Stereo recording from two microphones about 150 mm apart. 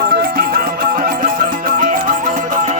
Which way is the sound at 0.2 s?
80° right.